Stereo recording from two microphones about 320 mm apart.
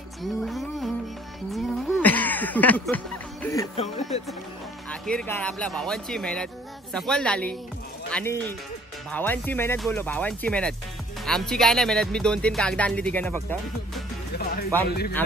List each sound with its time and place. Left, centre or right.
0.2 s music: centre
3.4 s speech: centre
5.0 s speech: centre
14.3 s music: left
14.9 s speech: left